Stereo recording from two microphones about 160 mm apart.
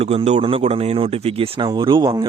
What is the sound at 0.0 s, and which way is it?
Speech, 40° right (ahead or behind).